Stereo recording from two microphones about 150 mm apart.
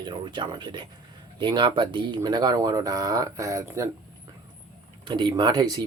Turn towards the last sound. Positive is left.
turn(degrees=-25)  # may be behind; listen again after turning